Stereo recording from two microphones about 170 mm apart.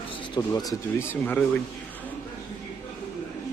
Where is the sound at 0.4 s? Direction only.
20° left (ahead or behind).